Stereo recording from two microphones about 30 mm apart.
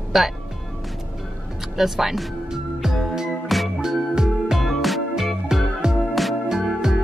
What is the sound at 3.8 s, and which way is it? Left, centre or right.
Music, centre.